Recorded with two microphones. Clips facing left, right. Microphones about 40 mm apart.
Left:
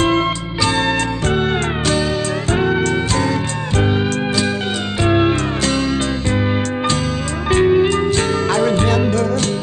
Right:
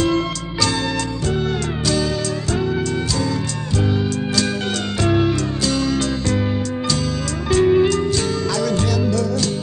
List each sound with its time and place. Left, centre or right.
0.0 s music: left
2.5 s music: left
5.0 s music: left
7.4 s music: left
7.7 s music: left
8.2 s music: left